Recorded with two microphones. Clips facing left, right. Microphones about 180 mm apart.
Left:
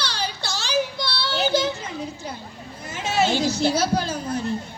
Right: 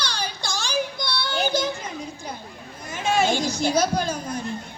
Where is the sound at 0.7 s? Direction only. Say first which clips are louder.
Left 3 dB; 15° right (ahead or behind).